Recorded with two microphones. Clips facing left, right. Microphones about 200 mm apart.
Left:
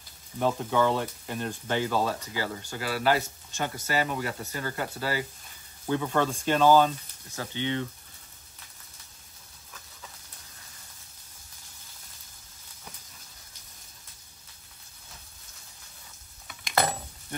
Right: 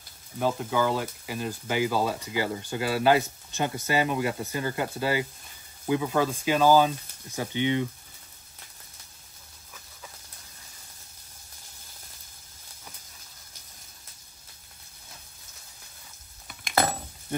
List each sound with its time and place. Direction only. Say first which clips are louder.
0.4 s speech: left 1 dB; centre (ahead or behind)
2.3 s speech: right 4 dB; 20° right (ahead or behind)
5.9 s speech: right 2 dB; 5° right (ahead or behind)